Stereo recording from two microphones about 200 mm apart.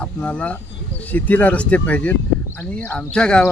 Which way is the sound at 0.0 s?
5° left (ahead or behind).